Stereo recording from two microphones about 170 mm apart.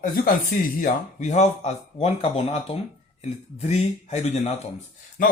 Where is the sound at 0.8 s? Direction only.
45° left (ahead or behind).